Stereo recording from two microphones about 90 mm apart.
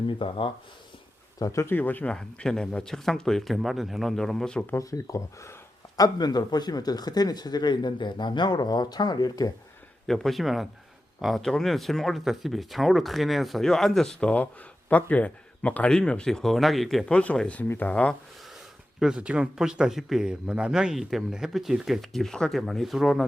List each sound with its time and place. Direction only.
0.1 s speech: 70° left (ahead or behind)
1.4 s speech: 35° left (ahead or behind)
1.7 s speech: 20° left (ahead or behind)
2.1 s speech: 5° left (ahead or behind)
4.8 s speech: 40° left (ahead or behind)
6.0 s speech: 50° left (ahead or behind)
10.1 s speech: centre (ahead or behind)
17.1 s speech: 10° left (ahead or behind)
18.9 s speech: 10° right (ahead or behind)